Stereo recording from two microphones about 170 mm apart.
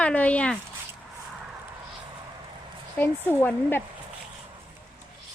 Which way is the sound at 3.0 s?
10° left (ahead or behind).